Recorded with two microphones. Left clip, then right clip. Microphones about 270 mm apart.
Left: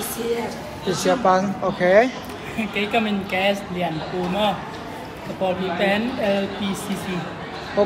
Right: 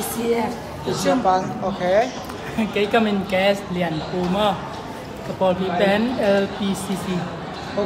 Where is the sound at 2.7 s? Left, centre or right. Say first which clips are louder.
Right 3 dB; centre.